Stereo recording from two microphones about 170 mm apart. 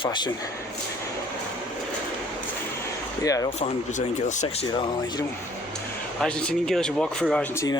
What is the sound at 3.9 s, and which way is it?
Speech, 45° left (ahead or behind).